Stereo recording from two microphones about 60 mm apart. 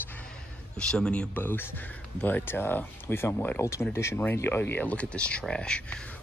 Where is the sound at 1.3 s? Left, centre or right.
Left.